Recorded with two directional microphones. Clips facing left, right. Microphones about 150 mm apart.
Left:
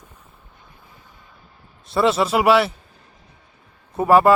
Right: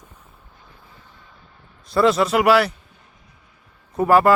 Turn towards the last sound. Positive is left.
turn(degrees=0)  # may be behind; listen again after turning